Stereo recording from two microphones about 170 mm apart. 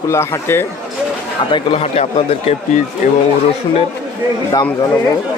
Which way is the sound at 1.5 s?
30° left (ahead or behind).